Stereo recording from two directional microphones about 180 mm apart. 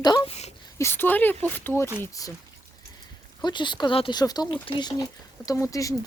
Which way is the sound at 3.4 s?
25° left (ahead or behind).